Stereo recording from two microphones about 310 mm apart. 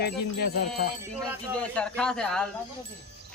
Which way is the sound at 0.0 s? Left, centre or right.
Left.